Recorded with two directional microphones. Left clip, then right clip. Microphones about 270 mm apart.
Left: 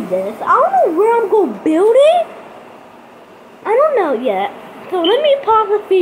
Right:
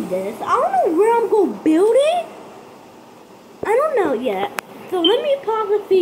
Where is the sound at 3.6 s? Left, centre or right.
Centre.